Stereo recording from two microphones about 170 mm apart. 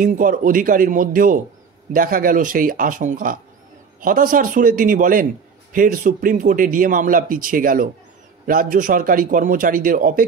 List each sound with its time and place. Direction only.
0.0 s a man's voice: 50° right (ahead or behind)